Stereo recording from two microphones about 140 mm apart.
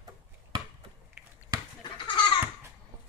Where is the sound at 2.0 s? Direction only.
35° left (ahead or behind).